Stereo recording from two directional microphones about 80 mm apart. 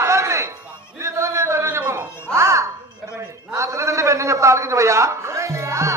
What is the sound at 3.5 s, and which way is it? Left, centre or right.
A man's voice, right.